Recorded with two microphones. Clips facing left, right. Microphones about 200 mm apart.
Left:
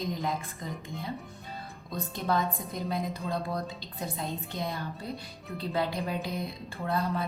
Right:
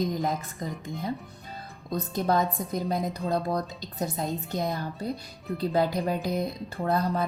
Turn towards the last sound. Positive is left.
turn(degrees=-40)  # may be behind; listen again after turning